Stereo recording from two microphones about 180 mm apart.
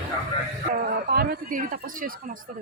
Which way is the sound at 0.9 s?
55° right (ahead or behind).